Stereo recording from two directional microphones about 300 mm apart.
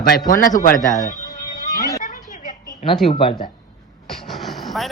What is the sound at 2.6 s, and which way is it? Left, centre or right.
Speech, centre.